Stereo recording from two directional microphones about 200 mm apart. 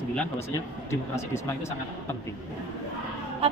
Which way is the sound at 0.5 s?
15° left (ahead or behind).